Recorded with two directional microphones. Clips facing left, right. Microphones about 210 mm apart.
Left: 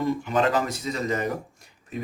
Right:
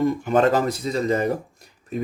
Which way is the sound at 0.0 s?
45° right (ahead or behind).